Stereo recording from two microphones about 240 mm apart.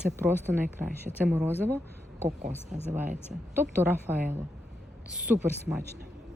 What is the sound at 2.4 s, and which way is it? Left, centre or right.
Speech, right.